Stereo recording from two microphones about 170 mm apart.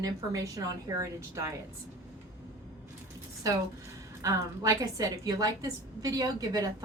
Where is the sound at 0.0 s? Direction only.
20° right (ahead or behind).